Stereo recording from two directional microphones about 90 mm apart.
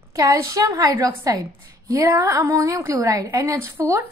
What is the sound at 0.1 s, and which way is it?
A woman's voice, 40° right (ahead or behind).